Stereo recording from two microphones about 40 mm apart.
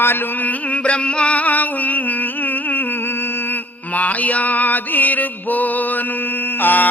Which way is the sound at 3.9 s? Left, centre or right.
Left.